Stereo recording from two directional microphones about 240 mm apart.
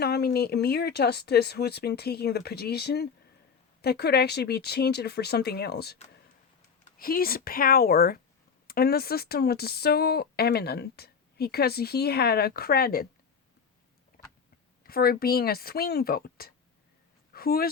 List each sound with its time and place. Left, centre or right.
0.0 s speech: left
7.0 s speech: left
14.8 s speech: left